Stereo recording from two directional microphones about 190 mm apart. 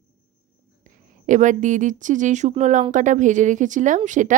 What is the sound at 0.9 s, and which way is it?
Speech, 40° right (ahead or behind).